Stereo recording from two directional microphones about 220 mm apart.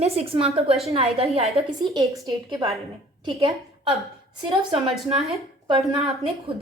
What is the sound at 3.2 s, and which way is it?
Speech, 25° right (ahead or behind).